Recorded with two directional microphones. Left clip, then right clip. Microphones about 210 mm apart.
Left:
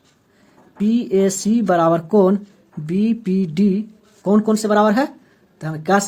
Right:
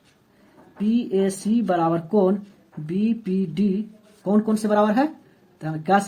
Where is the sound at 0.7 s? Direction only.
40° left (ahead or behind).